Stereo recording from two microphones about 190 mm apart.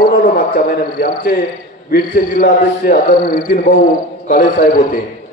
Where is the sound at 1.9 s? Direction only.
50° left (ahead or behind).